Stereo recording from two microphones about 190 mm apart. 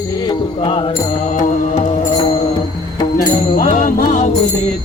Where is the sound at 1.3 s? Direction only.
40° left (ahead or behind).